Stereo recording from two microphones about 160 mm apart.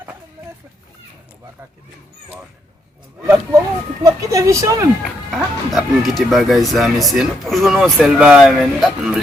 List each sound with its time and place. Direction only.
3.2 s a sound: 15° right (ahead or behind)
4.0 s speech: 20° right (ahead or behind)
5.0 s speech: centre (ahead or behind)